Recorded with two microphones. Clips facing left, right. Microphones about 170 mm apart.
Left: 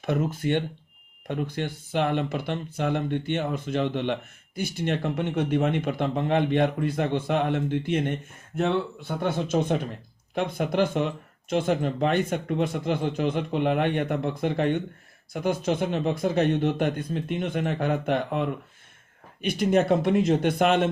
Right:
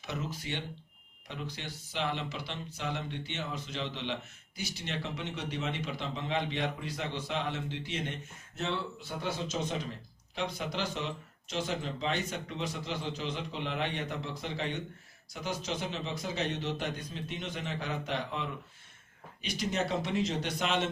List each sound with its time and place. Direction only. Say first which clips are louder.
0.0 s speech: left 12 dB; 55° left (ahead or behind)